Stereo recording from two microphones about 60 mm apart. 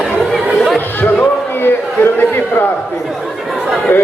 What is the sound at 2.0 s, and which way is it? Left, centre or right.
Chatter, left.